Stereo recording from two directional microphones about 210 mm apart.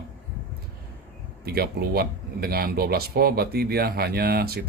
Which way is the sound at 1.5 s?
50° right (ahead or behind).